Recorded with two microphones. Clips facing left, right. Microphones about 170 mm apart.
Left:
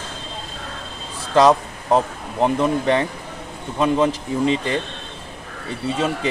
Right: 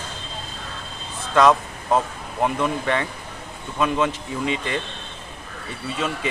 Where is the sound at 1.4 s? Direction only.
30° left (ahead or behind).